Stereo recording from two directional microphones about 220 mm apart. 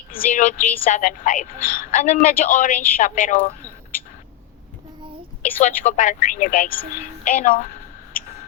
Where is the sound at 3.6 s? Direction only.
15° right (ahead or behind).